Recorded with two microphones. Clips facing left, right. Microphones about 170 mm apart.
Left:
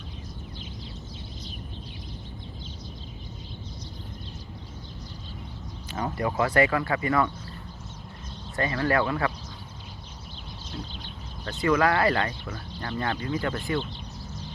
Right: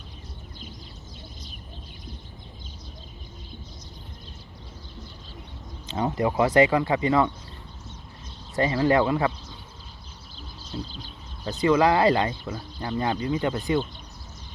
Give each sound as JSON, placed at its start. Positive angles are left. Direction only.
{"t": 5.9, "sound": "speech", "side_deg": -20}
{"t": 8.5, "sound": "speech", "side_deg": -20}
{"t": 11.6, "sound": "speech", "side_deg": -20}